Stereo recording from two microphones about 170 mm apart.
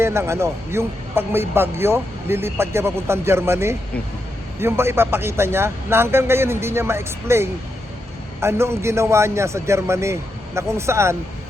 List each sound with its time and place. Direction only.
0.0 s a man's voice: 15° right (ahead or behind)